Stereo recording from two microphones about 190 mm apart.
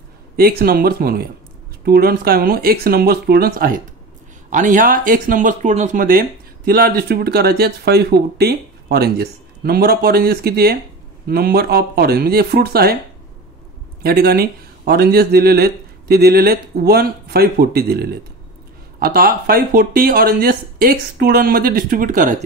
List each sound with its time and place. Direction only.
0.4 s speech: 50° right (ahead or behind)
14.0 s speech: 50° right (ahead or behind)